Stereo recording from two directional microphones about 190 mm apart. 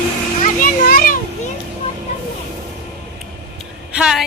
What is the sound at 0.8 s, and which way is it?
Children playing, 50° left (ahead or behind).